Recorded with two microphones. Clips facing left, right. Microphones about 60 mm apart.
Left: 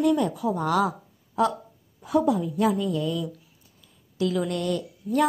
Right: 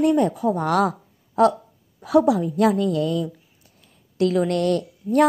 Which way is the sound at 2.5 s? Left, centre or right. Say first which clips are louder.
Right 5 dB; right.